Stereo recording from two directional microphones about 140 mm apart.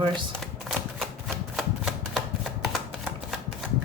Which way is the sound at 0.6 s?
Centre (ahead or behind).